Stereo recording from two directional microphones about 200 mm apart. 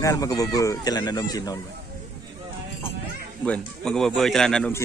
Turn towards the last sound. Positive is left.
turn(degrees=5)  # may be behind; listen again after turning